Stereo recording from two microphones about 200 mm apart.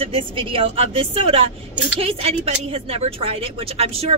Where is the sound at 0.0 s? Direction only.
25° right (ahead or behind).